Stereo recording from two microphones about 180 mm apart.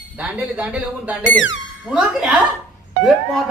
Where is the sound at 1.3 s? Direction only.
90° left.